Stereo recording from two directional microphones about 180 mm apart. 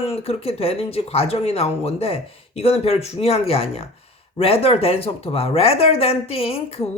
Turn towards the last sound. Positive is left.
turn(degrees=35)  # may be behind; listen again after turning